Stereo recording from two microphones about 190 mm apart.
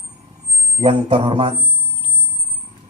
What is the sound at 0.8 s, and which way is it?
Speech, 25° right (ahead or behind).